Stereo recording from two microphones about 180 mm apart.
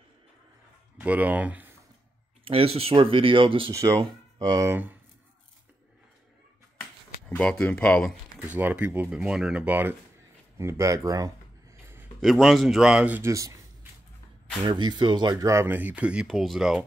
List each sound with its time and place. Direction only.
0.9 s speech: 10° right (ahead or behind)
2.4 s speech: 35° right (ahead or behind)
3.7 s speech: 15° right (ahead or behind)
6.8 s a sound: 5° left (ahead or behind)
8.5 s speech: 10° right (ahead or behind)
11.8 s a sound: 15° right (ahead or behind)
12.2 s a man's voice: centre (ahead or behind); by 13.6 s 15° right (ahead or behind)
14.7 s speech: 25° right (ahead or behind); by 16.8 s centre (ahead or behind)